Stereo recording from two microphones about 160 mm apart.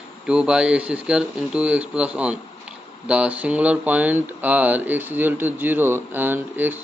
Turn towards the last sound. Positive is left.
turn(degrees=-10)  # may be behind; listen again after turning